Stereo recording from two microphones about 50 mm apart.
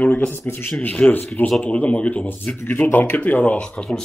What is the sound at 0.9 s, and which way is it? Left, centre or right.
Speech, left.